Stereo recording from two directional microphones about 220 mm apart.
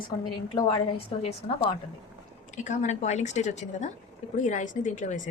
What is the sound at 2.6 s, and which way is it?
A woman's voice, 35° left (ahead or behind).